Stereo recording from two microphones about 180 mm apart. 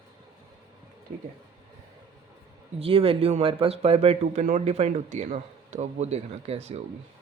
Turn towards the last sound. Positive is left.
turn(degrees=-35)  # may be behind; listen again after turning